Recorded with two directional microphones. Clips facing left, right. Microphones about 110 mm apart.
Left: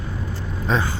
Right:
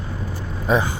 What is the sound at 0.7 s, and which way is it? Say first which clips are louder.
Speech: right 3 dB; 10° right (ahead or behind).